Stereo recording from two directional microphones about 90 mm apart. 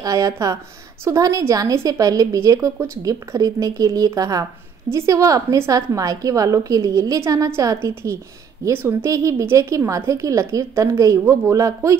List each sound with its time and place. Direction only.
0.0 s a woman's voice: 40° right (ahead or behind)